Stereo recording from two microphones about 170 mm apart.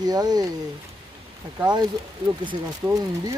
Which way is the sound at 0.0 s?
25° right (ahead or behind).